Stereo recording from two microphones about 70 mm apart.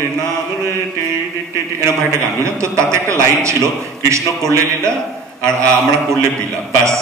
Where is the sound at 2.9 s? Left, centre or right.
Right.